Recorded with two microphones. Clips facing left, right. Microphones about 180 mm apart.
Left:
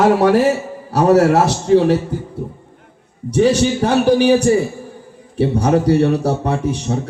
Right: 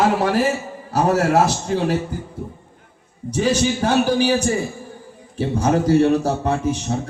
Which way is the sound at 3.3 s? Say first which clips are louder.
Left 5 dB; 65° left (ahead or behind).